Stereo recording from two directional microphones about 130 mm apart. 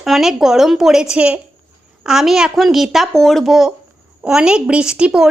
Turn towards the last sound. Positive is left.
turn(degrees=-5)  # may be behind; listen again after turning